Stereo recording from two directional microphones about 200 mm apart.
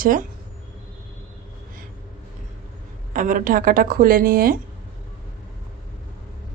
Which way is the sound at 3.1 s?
40° right (ahead or behind).